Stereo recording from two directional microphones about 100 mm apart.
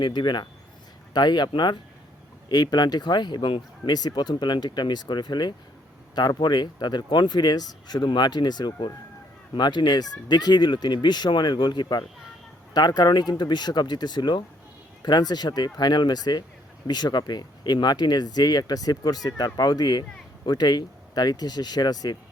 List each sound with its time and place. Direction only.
0.0 s speech: 50° left (ahead or behind)